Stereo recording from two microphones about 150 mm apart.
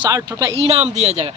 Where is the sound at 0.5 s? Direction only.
40° right (ahead or behind).